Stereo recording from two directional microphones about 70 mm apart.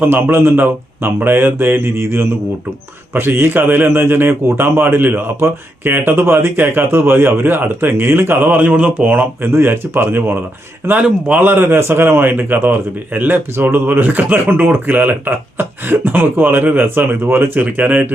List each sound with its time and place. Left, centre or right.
0.0 s a man's voice: right
11.0 s speech: right